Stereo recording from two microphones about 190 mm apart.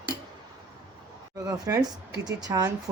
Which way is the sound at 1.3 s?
20° right (ahead or behind).